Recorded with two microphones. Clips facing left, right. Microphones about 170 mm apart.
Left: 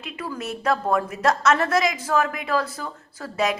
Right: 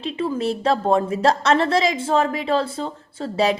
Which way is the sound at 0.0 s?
30° right (ahead or behind).